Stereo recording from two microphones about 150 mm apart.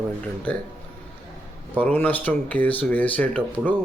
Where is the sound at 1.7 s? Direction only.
10° left (ahead or behind).